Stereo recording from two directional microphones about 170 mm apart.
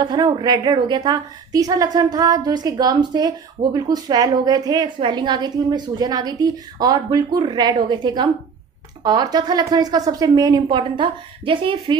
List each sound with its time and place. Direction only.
0.0 s a woman's voice: 25° right (ahead or behind)